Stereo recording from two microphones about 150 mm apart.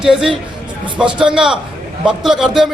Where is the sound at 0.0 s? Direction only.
5° right (ahead or behind).